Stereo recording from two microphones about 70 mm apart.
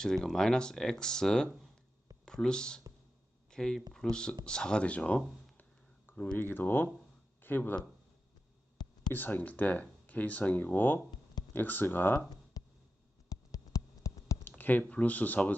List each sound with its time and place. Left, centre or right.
0.0 s speech: centre
6.3 s speech: left
8.8 s a sound: left
9.1 s speech: left
12.6 s a sound: left
14.6 s speech: left